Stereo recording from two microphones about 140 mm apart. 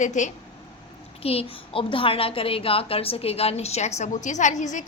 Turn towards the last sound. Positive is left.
turn(degrees=60)  # may be behind; listen again after turning